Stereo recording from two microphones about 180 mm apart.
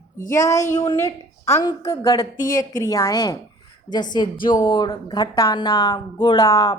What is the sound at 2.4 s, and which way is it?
Speech, 50° left (ahead or behind).